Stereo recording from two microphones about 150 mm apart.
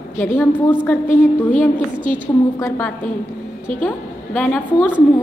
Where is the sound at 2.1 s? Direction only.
15° left (ahead or behind).